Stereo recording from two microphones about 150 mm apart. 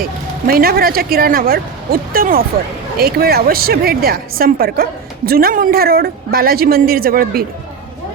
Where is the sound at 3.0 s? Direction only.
90° right.